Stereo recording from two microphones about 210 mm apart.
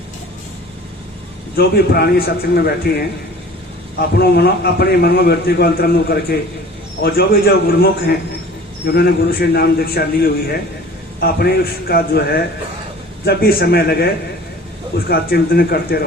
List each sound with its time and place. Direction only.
1.5 s a man's voice: 45° left (ahead or behind)
4.1 s a man's voice: 50° left (ahead or behind)